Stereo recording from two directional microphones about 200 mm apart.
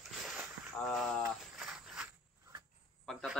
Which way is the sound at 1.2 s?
5° right (ahead or behind).